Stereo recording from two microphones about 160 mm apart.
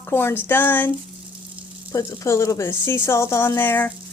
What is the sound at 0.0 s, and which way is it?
Speech, 15° left (ahead or behind).